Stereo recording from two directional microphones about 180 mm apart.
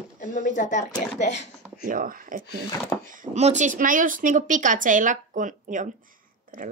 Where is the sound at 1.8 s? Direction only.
50° right (ahead or behind).